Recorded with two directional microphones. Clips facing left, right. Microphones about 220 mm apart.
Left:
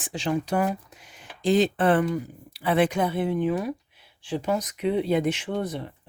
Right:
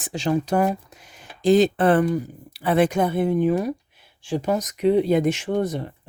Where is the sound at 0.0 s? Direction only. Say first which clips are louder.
Right 4 dB; 40° right (ahead or behind).